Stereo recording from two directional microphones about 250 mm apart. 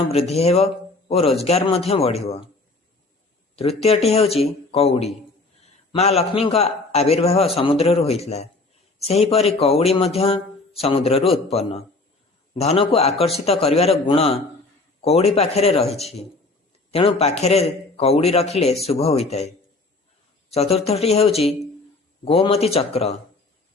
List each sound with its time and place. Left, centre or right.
0.1 s a man's voice: left
3.5 s a man's voice: left